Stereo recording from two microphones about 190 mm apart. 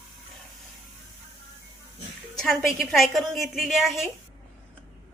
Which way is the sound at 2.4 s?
Centre (ahead or behind).